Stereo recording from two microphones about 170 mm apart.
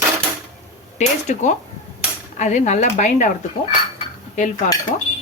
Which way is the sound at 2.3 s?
45° left (ahead or behind).